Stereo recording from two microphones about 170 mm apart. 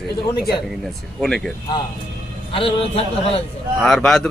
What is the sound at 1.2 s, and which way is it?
Speech, 5° left (ahead or behind).